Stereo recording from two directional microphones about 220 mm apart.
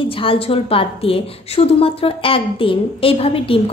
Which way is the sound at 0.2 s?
25° left (ahead or behind).